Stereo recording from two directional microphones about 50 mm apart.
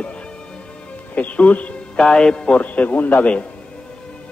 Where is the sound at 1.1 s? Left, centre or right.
Left.